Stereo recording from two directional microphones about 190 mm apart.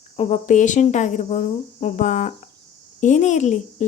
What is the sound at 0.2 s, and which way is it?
Speech, 40° left (ahead or behind).